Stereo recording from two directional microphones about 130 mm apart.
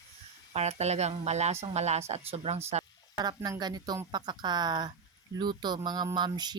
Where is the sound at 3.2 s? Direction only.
30° right (ahead or behind).